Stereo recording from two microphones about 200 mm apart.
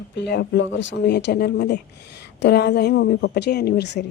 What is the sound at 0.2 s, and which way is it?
A woman's voice, 55° left (ahead or behind).